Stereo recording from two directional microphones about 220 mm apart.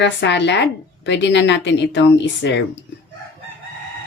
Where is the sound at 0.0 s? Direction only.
55° left (ahead or behind).